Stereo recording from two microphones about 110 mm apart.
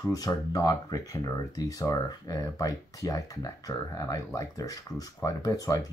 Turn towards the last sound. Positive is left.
turn(degrees=35)  # may be behind; listen again after turning